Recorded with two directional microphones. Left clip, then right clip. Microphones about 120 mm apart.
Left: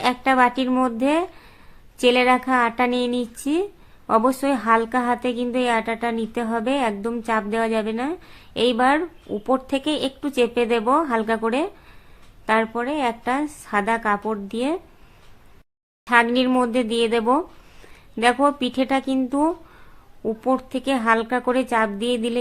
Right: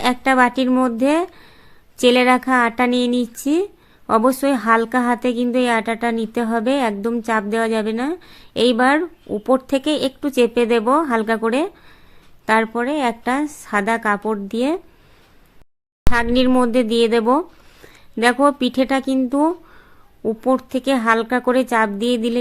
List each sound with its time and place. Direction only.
0.0 s a woman's voice: 30° right (ahead or behind)
16.1 s a woman's voice: 30° right (ahead or behind)